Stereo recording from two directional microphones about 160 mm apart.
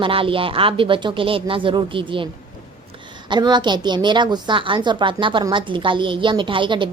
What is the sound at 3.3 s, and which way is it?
A woman's voice, 25° right (ahead or behind).